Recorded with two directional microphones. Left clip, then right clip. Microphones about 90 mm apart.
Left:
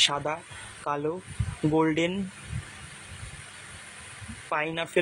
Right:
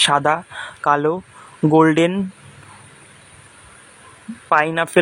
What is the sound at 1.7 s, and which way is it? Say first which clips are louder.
Speech: right 11 dB; 80° right.